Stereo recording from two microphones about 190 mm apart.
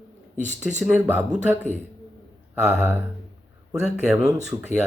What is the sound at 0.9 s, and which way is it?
Speech, 10° right (ahead or behind).